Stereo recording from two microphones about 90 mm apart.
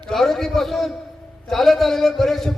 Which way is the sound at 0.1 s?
5° left (ahead or behind).